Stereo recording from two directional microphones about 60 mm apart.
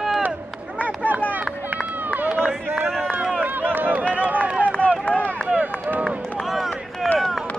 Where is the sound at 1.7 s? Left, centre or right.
Right.